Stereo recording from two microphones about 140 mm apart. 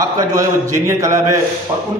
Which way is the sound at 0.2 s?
20° right (ahead or behind).